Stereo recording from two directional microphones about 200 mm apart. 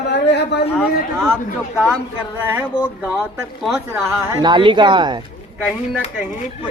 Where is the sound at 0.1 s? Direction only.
60° left (ahead or behind).